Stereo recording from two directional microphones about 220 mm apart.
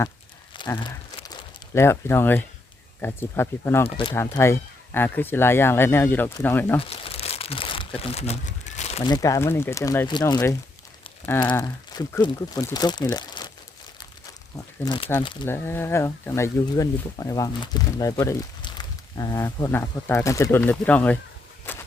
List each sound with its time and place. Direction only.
0.5 s a sound: 20° left (ahead or behind)
3.0 s speech: 10° left (ahead or behind)
3.8 s speech: 25° left (ahead or behind)
4.1 s speech: 10° left (ahead or behind)
6.7 s crumpling: 25° left (ahead or behind)
9.0 s speech: 15° left (ahead or behind)
14.8 s speech: 25° left (ahead or behind)
15.4 s speech: 10° left (ahead or behind)